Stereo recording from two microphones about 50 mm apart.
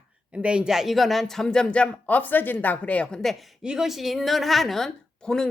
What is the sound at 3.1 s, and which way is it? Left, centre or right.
Speech, centre.